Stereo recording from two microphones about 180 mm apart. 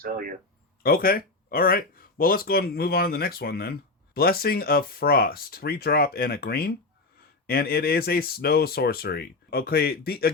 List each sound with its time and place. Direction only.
0.0 s speech: 50° right (ahead or behind)
0.8 s speech: 55° left (ahead or behind)